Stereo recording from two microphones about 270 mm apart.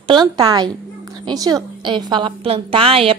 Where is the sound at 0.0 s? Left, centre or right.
Centre.